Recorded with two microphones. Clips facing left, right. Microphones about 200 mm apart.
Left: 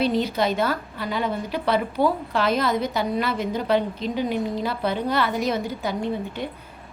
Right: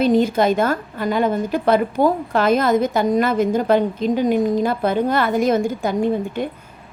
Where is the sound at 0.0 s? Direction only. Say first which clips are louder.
Right 6 dB; 50° right (ahead or behind).